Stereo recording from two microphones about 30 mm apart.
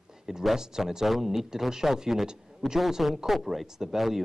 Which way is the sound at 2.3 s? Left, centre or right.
Right.